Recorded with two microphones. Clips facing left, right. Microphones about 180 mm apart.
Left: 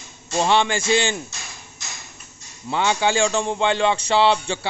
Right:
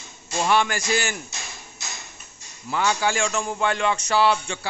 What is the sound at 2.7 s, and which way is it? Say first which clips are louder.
A man's voice: left 3 dB; 25° left (ahead or behind).